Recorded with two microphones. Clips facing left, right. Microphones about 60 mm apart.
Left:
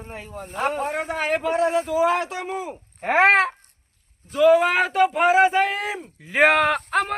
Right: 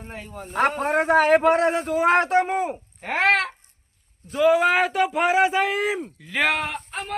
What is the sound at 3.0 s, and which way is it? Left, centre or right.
Speech, left.